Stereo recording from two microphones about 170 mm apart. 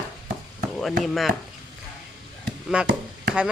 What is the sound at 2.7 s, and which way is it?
Speech, 5° right (ahead or behind).